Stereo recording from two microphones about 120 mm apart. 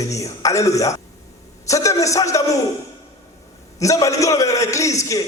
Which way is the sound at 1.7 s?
25° left (ahead or behind).